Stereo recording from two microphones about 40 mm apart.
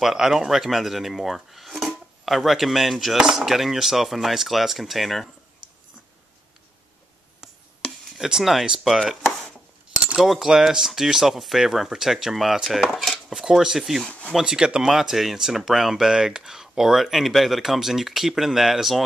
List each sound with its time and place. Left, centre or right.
0.0 s speech: centre
7.8 s a sound: centre
8.2 s speech: centre
10.2 s speech: centre
14.4 s speech: centre
14.9 s speech: centre